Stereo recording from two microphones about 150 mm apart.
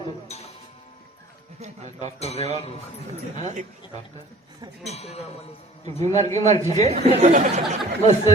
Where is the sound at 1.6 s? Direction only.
50° right (ahead or behind).